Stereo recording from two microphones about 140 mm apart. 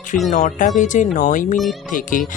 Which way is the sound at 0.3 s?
65° left (ahead or behind).